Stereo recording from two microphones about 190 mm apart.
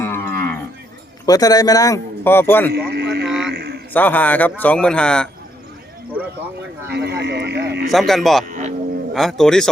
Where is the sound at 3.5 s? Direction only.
55° right (ahead or behind).